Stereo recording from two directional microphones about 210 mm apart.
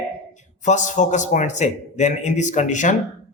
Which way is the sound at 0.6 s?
35° left (ahead or behind).